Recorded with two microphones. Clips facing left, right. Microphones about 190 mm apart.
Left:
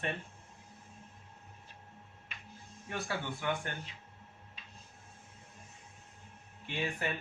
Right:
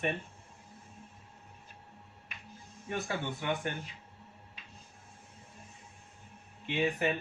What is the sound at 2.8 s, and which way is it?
Speech, 20° right (ahead or behind).